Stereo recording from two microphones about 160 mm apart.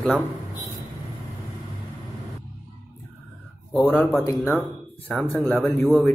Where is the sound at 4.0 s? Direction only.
10° left (ahead or behind).